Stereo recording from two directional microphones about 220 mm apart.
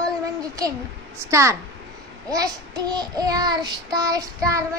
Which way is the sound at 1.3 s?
15° right (ahead or behind).